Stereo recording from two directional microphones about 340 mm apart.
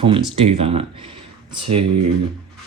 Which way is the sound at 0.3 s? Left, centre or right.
Centre.